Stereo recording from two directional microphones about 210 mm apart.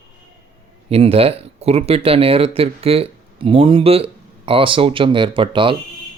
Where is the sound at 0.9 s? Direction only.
30° right (ahead or behind).